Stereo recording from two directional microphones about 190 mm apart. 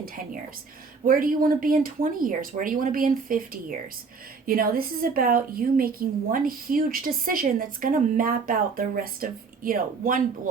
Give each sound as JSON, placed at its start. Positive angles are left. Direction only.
{"t": 1.0, "sound": "a woman's voice", "side_deg": -50}